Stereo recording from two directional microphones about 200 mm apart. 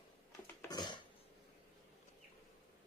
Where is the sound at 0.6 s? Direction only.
20° left (ahead or behind).